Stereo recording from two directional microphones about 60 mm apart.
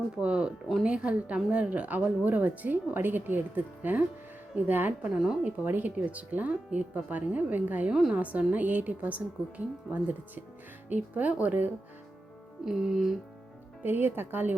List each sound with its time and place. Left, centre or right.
0.2 s a woman's voice: centre
5.0 s speech: centre
5.5 s a woman's voice: right
7.9 s speech: centre
8.1 s a woman's voice: right
12.6 s speech: centre
13.8 s speech: right